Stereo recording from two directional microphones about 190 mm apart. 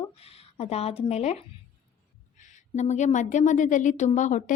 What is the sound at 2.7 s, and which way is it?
A woman's voice, 40° left (ahead or behind).